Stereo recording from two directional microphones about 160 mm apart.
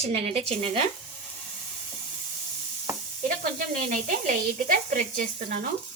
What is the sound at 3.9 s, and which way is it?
Speech, 55° right (ahead or behind).